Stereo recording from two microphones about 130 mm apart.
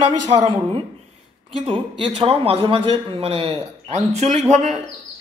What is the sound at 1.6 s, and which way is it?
A man's voice, 45° right (ahead or behind).